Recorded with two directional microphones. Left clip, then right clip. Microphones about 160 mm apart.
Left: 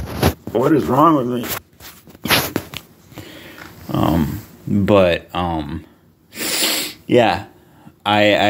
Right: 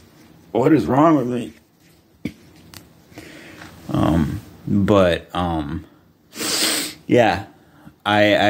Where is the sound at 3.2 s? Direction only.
5° right (ahead or behind).